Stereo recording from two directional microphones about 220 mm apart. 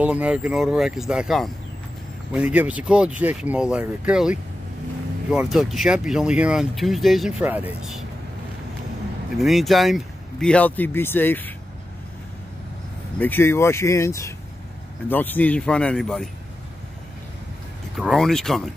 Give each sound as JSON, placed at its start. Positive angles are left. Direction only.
{"t": 0.0, "sound": "speech", "side_deg": -5}
{"t": 9.4, "sound": "speech", "side_deg": 0}
{"t": 13.2, "sound": "speech", "side_deg": 10}
{"t": 17.9, "sound": "speech", "side_deg": 0}